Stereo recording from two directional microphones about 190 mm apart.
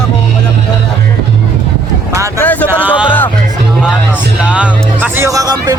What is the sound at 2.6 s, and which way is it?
Speech, 10° right (ahead or behind).